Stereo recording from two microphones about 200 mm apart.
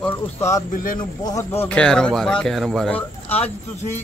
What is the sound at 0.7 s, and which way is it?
Speech, 45° left (ahead or behind).